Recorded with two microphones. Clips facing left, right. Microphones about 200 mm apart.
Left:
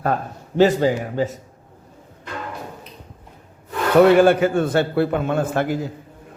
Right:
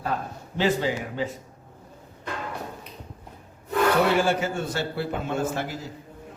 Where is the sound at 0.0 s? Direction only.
50° left (ahead or behind).